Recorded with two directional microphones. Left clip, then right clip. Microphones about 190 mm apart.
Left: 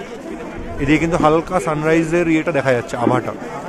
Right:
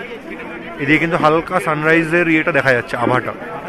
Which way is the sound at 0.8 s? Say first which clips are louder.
Right 1 dB; 10° left (ahead or behind).